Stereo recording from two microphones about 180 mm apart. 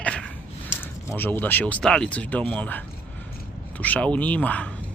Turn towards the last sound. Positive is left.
turn(degrees=10)  # may be behind; listen again after turning